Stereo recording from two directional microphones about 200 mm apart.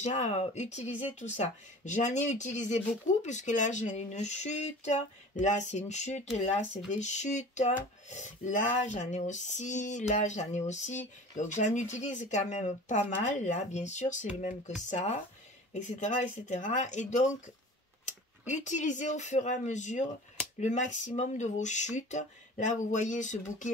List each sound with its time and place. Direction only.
0.0 s female singing: 35° left (ahead or behind)
18.5 s female singing: 35° left (ahead or behind)